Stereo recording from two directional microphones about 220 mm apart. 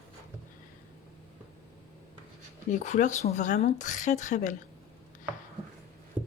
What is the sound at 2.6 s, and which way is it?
Speech, 35° left (ahead or behind).